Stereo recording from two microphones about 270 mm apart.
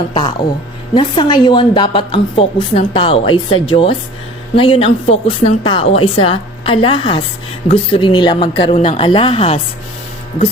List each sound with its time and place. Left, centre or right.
0.1 s a woman's voice: centre